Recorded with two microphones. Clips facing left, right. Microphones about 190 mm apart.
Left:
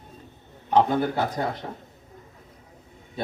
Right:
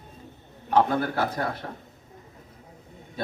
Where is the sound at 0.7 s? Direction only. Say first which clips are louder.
Left 2 dB; 20° left (ahead or behind).